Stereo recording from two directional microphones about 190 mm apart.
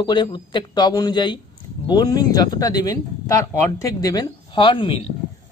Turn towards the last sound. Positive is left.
turn(degrees=30)  # may be behind; listen again after turning